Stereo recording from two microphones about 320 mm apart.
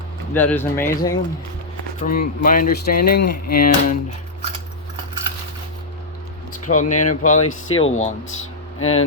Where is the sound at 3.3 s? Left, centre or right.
Left.